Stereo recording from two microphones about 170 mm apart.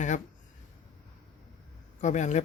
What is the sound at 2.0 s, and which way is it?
Speech, 45° left (ahead or behind).